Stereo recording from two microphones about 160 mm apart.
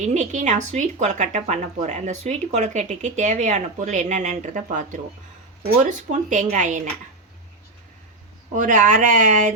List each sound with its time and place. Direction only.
0.0 s speech: 45° right (ahead or behind)
8.5 s speech: 55° right (ahead or behind)